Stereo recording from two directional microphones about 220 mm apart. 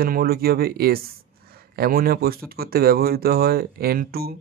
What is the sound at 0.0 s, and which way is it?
Speech, 40° right (ahead or behind).